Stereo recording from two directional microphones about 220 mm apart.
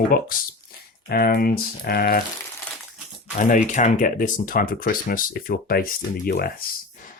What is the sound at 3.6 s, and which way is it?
Speech, 35° left (ahead or behind).